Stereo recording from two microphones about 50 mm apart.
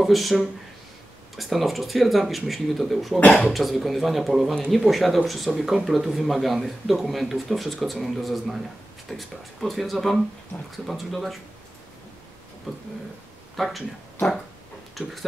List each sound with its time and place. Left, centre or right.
0.0 s speech: centre
3.2 s speech: left
3.5 s speech: centre
13.6 s speech: centre
15.0 s speech: centre